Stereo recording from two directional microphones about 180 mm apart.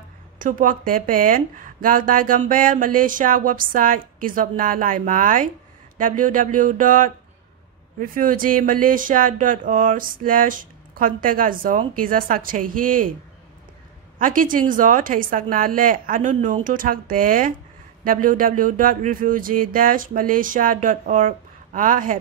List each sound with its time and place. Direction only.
0.4 s speech: 50° right (ahead or behind)
14.1 s speech: 50° right (ahead or behind)